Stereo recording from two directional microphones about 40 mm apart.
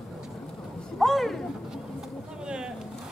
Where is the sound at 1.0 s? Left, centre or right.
Centre.